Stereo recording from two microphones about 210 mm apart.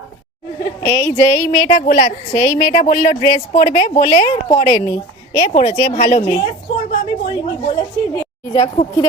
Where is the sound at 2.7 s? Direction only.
35° left (ahead or behind).